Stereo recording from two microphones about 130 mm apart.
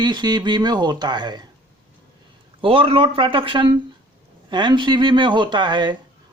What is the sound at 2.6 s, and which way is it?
Speech, 45° right (ahead or behind).